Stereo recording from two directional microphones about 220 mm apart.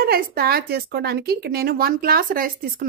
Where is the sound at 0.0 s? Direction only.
45° right (ahead or behind).